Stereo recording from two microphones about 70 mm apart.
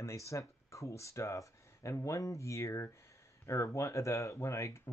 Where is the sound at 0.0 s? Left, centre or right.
Left.